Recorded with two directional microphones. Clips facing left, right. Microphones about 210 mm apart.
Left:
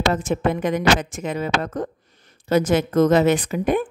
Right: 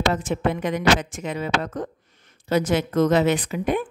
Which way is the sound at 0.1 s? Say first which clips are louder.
Left 2 dB; 45° left (ahead or behind).